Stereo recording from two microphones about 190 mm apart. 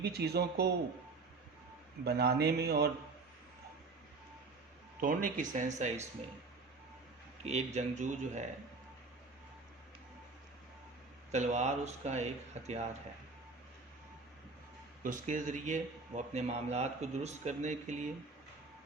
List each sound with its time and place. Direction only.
0.0 s speech: 60° right (ahead or behind)
2.0 s speech: 55° right (ahead or behind)
4.9 s speech: 45° right (ahead or behind)
7.4 s speech: 35° right (ahead or behind)
11.3 s speech: 35° right (ahead or behind)
15.0 s speech: 45° right (ahead or behind)